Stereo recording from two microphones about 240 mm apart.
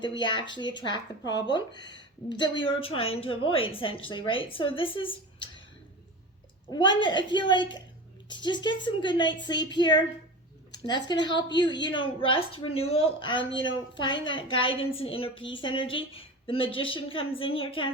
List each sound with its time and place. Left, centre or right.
0.0 s a woman's voice: centre
7.0 s a woman's voice: centre